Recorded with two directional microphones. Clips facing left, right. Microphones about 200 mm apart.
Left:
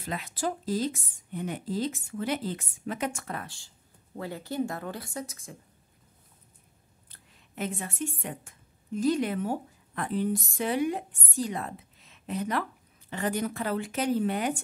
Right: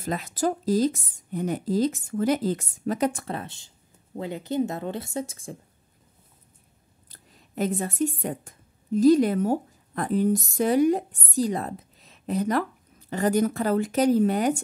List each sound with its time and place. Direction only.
0.0 s speech: 45° right (ahead or behind)
7.1 s a woman's voice: 40° right (ahead or behind)